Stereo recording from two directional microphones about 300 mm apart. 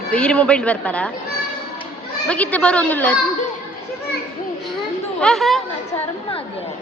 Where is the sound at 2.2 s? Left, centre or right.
Centre.